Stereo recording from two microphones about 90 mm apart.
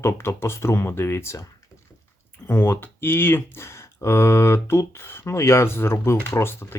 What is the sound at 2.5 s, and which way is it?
Speech, 25° left (ahead or behind).